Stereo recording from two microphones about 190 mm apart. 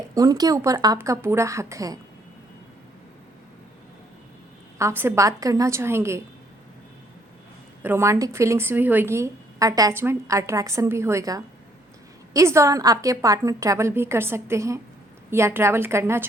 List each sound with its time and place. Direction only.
0.1 s speech: 20° right (ahead or behind)
4.8 s speech: 15° right (ahead or behind)
7.8 s speech: 10° right (ahead or behind)